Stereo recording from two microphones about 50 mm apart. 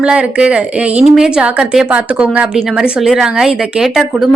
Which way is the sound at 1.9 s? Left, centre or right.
Right.